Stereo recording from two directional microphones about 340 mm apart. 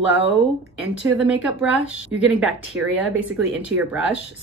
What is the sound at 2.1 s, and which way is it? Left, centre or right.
Speech, centre.